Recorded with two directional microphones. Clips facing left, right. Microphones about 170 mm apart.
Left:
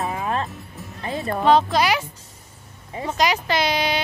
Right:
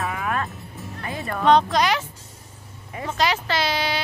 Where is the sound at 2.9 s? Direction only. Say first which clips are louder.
Left 2 dB; 25° left (ahead or behind).